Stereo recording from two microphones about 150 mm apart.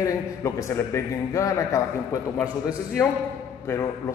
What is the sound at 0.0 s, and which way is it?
A man's voice, 20° left (ahead or behind).